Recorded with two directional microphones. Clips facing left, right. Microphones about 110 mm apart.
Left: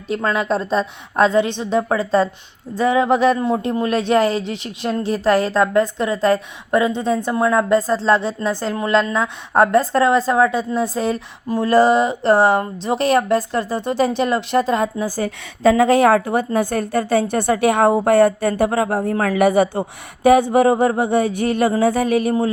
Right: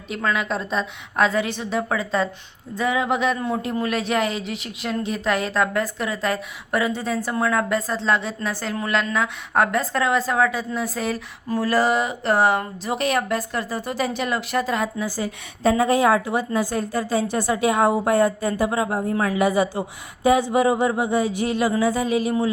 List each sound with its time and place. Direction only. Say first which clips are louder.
0.1 s a woman's voice: left 5 dB; 35° left (ahead or behind)
15.7 s a woman's voice: left 4 dB; 85° left; by 22.5 s 50° left (ahead or behind)